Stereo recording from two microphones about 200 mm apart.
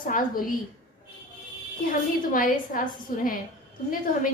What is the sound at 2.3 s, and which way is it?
A woman's voice, 45° left (ahead or behind).